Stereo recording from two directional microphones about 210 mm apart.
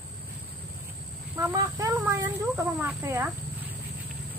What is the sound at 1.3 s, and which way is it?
Speech, 15° right (ahead or behind).